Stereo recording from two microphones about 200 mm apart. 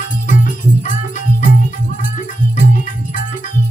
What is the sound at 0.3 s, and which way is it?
Music, 40° left (ahead or behind).